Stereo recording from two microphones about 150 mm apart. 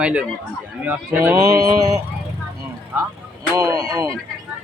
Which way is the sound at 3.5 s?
25° right (ahead or behind).